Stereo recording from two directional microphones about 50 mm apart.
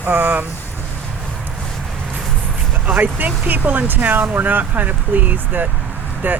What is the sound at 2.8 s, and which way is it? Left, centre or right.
Speech, right.